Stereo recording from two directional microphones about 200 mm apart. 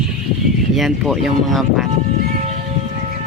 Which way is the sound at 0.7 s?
Centre (ahead or behind).